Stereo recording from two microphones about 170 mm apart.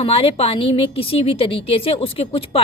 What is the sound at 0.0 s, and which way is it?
A woman's voice, 35° left (ahead or behind).